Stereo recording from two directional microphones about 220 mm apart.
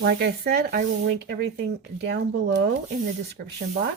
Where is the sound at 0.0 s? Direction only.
50° right (ahead or behind).